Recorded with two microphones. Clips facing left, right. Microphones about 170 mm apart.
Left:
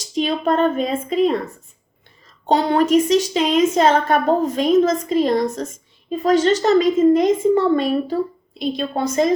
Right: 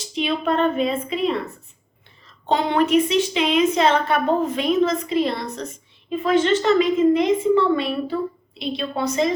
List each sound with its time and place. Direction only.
0.0 s a woman's voice: 40° left (ahead or behind)
2.5 s a woman's voice: 40° left (ahead or behind)